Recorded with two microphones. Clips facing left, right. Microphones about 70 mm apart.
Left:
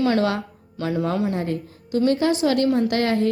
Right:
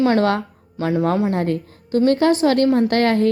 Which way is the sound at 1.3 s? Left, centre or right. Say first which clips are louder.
Right 4 dB; right.